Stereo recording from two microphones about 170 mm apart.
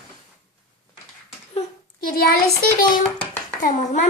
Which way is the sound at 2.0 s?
60° left (ahead or behind).